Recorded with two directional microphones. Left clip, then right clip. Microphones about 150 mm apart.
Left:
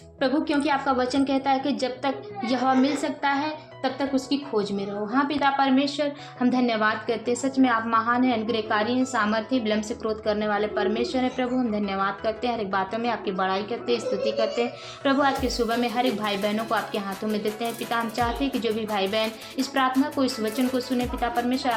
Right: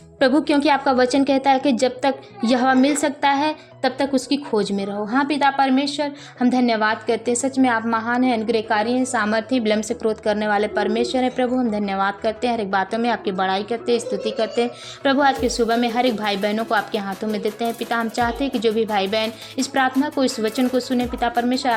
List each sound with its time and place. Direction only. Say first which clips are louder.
0.2 s a woman's voice: right 7 dB; 50° right (ahead or behind)
5.7 s a woman's voice: right 2 dB; 30° right (ahead or behind)